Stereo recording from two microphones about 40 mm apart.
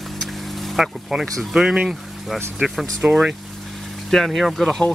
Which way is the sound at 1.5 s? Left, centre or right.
Centre.